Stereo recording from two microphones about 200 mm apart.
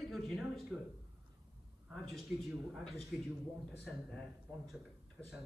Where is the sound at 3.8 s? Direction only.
Centre (ahead or behind).